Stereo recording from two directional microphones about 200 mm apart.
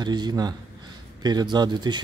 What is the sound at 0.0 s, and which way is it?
Speech, 20° right (ahead or behind).